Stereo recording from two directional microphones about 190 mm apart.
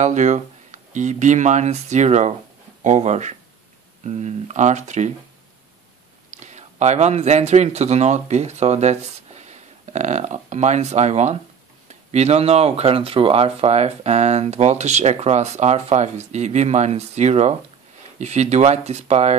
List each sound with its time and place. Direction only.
0.0 s speech: 40° right (ahead or behind)
6.4 s speech: 40° right (ahead or behind)